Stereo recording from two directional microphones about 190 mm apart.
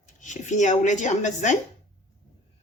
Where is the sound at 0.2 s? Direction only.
40° left (ahead or behind).